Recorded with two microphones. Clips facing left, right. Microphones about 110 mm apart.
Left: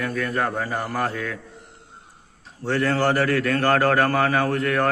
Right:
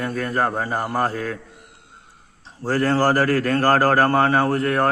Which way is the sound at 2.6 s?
35° right (ahead or behind).